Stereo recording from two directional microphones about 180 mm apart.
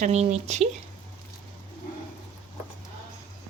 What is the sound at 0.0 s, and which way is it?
Speech, 40° right (ahead or behind).